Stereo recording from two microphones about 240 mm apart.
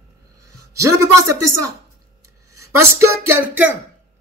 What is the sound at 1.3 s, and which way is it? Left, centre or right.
Speech, right.